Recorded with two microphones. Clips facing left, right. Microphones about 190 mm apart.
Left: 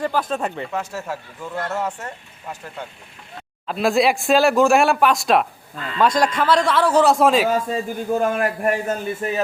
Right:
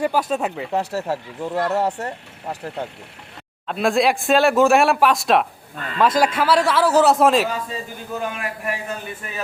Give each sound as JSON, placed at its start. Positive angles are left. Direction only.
{"t": 0.0, "sound": "speech", "side_deg": -10}
{"t": 0.7, "sound": "speech", "side_deg": -35}
{"t": 3.7, "sound": "speech", "side_deg": 0}
{"t": 7.4, "sound": "a man's voice", "side_deg": 50}